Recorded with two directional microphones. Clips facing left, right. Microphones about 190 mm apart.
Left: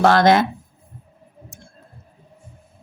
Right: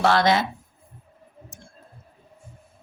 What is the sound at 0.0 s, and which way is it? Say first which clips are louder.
Speech: left 5 dB; 50° left (ahead or behind).